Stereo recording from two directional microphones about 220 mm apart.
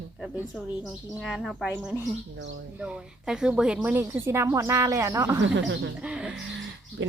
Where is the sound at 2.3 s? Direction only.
55° right (ahead or behind).